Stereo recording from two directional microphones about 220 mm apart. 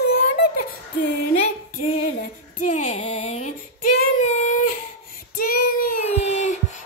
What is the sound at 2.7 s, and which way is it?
Music, 30° left (ahead or behind).